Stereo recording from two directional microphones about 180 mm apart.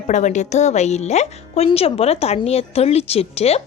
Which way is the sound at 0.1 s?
40° left (ahead or behind).